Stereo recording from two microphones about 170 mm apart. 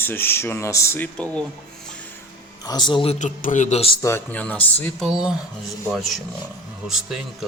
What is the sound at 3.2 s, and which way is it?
Speech, 45° left (ahead or behind).